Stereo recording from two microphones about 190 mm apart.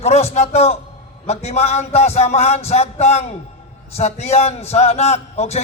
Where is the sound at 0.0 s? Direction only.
35° left (ahead or behind).